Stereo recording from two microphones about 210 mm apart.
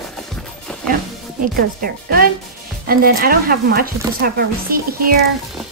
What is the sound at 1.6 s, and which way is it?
Speech, 45° right (ahead or behind).